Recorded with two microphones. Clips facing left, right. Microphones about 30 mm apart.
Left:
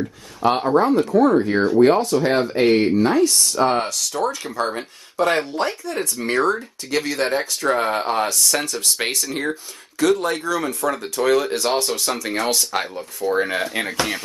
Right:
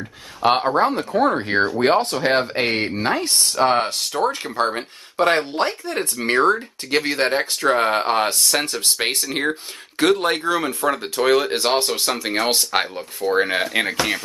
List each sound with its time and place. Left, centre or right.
0.7 s speech: right